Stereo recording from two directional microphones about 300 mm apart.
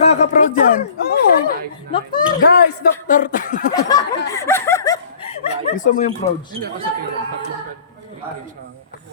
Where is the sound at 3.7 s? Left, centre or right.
Centre.